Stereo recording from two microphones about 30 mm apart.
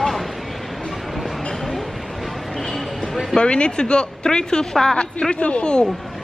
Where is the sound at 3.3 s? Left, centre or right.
Left.